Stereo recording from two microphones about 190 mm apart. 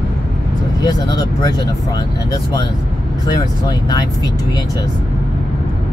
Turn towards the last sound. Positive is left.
turn(degrees=20)  # may be behind; listen again after turning